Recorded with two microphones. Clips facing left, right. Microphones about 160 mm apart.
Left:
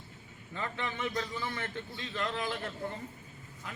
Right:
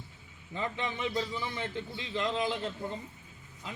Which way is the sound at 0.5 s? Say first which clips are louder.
Right 2 dB; 20° right (ahead or behind).